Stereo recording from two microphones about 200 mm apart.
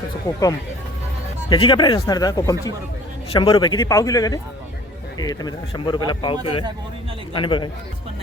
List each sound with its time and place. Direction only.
0.3 s speech: 15° left (ahead or behind)
1.6 s speech: 20° left (ahead or behind)